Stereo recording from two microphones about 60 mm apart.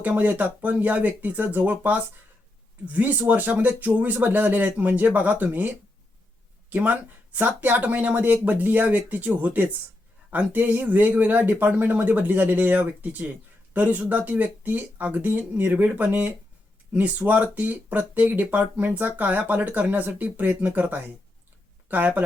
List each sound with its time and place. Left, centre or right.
0.0 s speech: right